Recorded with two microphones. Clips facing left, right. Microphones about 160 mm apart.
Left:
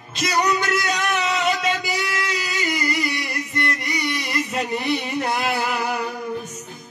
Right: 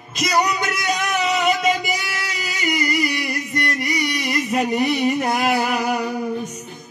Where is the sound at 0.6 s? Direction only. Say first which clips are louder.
Even; 20° right (ahead or behind).